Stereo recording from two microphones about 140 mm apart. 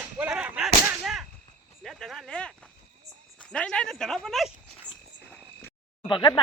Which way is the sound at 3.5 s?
5° left (ahead or behind).